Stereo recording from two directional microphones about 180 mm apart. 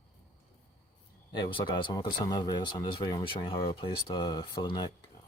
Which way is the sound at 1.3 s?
25° left (ahead or behind).